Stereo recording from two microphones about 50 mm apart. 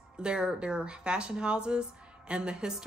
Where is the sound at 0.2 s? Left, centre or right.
Centre.